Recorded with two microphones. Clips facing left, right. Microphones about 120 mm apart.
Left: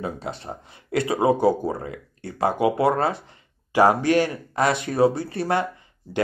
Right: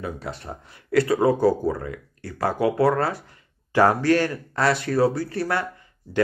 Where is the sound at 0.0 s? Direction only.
20° left (ahead or behind).